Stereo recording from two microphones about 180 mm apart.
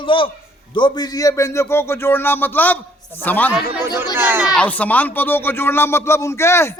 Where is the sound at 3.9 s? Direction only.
10° right (ahead or behind).